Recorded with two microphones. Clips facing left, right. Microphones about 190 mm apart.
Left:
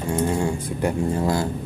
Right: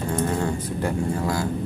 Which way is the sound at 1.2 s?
25° left (ahead or behind).